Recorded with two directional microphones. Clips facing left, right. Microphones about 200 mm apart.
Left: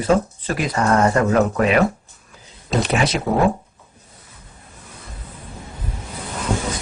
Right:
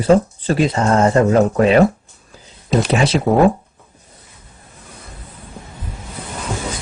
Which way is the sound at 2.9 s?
30° right (ahead or behind).